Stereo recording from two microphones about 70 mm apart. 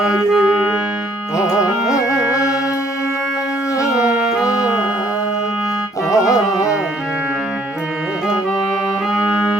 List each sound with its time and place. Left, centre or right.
0.0 s music: centre
4.0 s music: centre
6.1 s music: left
9.1 s music: centre